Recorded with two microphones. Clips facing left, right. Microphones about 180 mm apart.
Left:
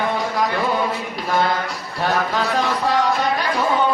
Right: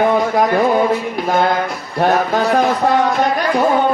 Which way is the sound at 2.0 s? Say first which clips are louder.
Right 6 dB; 50° right (ahead or behind).